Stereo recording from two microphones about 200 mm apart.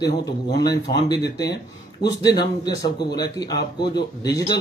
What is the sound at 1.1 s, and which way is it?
Speech, 20° left (ahead or behind).